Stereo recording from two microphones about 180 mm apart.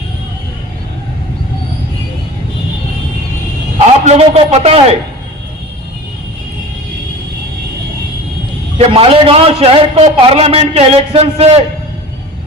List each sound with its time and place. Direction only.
4.0 s a man's voice: 35° right (ahead or behind)
8.9 s a man's voice: 30° right (ahead or behind)